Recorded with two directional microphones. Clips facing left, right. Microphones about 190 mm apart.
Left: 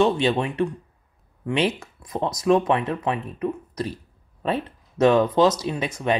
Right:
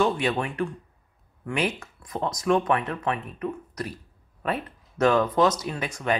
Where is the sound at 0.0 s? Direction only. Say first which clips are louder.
Left 4 dB; 25° left (ahead or behind).